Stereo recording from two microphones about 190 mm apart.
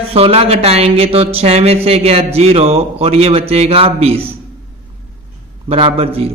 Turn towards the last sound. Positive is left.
turn(degrees=-30)  # may be behind; listen again after turning